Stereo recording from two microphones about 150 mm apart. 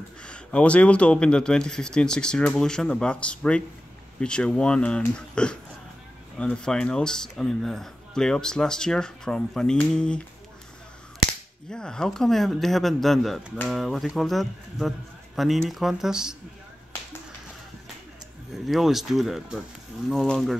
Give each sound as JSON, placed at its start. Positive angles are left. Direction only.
{"t": 0.2, "sound": "speech", "side_deg": 5}
{"t": 11.7, "sound": "speech", "side_deg": 5}
{"t": 18.5, "sound": "speech", "side_deg": 0}